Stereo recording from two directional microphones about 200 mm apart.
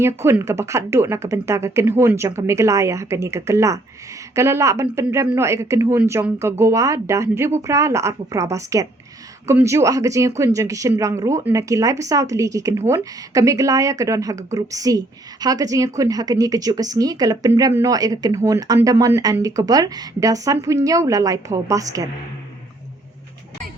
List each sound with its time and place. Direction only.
0.0 s a woman's voice: 10° right (ahead or behind)